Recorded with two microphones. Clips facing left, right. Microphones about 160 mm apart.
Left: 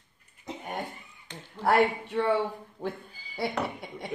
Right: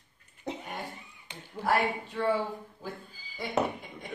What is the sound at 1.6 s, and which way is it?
Speech, 70° left (ahead or behind).